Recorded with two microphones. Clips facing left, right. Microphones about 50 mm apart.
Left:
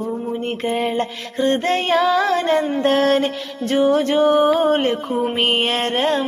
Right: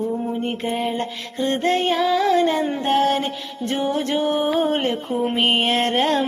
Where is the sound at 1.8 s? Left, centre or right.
Left.